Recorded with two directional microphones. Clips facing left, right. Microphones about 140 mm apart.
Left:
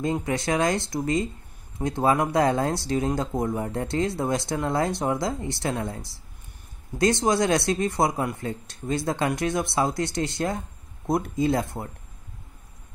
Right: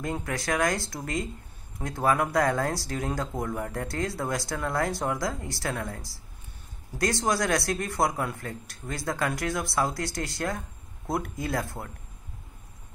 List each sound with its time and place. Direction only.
0.0 s speech: 20° left (ahead or behind)